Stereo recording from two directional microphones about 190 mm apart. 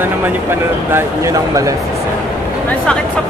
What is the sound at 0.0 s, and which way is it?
Speech, 10° right (ahead or behind).